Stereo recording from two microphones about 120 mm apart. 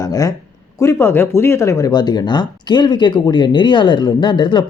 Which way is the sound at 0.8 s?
25° left (ahead or behind).